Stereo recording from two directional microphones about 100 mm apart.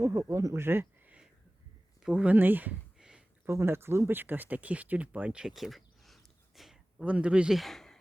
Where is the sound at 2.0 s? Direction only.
10° right (ahead or behind).